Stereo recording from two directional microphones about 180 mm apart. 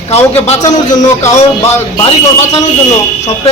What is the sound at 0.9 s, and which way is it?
Speech, 20° left (ahead or behind).